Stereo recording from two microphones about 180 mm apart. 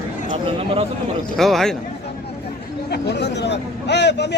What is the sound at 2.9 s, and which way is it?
Speech, 70° left (ahead or behind).